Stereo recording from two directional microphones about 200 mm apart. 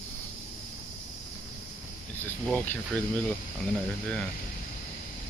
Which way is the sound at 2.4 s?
5° left (ahead or behind).